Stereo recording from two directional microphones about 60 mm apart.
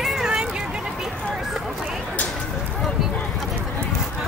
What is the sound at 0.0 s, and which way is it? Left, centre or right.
Vehicle, centre.